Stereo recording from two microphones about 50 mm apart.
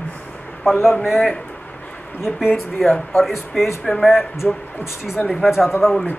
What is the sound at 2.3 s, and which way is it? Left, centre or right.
Speech, left.